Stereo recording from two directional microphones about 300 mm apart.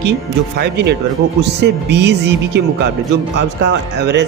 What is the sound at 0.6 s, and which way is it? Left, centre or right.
Speech, right.